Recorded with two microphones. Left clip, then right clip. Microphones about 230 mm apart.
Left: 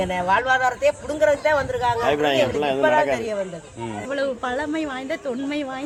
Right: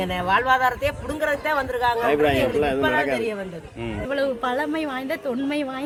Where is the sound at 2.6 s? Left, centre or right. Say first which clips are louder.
Even; left.